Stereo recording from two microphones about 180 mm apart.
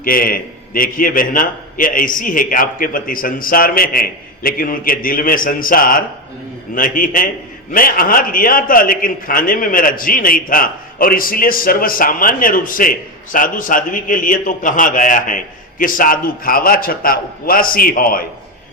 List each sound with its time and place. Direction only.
0.0 s a man's voice: 55° left (ahead or behind)